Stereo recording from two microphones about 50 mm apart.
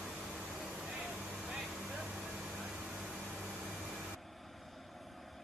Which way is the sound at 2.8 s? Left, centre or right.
Centre.